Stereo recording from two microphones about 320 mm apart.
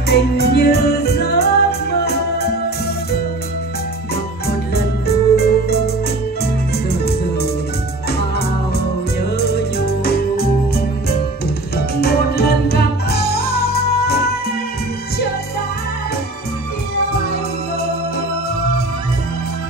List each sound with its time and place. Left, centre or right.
0.1 s music: left
4.5 s music: left
6.9 s music: left
9.4 s music: left
11.7 s music: left